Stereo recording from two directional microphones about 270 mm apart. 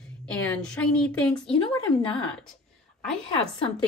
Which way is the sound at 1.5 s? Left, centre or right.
Centre.